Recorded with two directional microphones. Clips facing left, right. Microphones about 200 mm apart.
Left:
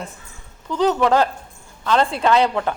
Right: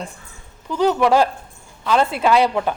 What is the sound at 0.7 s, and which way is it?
A woman's voice, 10° right (ahead or behind).